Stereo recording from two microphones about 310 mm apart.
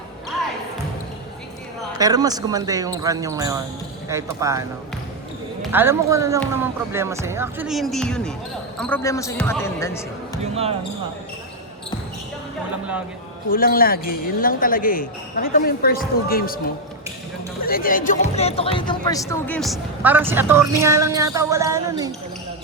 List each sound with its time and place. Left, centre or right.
2.0 s speech: centre
5.7 s speech: centre
10.4 s speech: centre
13.5 s speech: left
17.6 s speech: left; by 22.1 s centre